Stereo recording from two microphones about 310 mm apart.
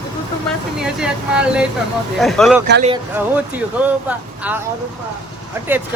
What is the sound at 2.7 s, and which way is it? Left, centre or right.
Speech, right.